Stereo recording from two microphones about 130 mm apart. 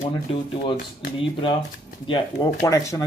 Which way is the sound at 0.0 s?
40° left (ahead or behind).